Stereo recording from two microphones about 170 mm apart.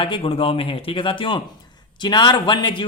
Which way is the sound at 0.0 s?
30° left (ahead or behind).